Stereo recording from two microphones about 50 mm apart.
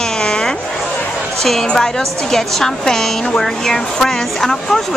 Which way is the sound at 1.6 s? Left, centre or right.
Centre.